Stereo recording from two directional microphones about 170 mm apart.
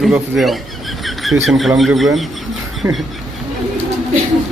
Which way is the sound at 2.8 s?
Centre (ahead or behind).